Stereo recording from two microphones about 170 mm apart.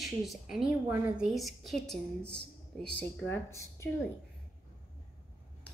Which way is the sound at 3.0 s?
15° left (ahead or behind).